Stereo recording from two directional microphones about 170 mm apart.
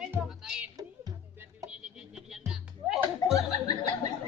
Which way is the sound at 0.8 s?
20° right (ahead or behind).